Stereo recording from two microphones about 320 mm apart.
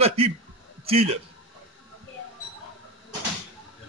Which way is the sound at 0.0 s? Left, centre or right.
Centre.